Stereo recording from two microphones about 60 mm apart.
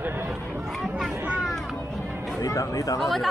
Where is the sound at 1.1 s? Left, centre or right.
Right.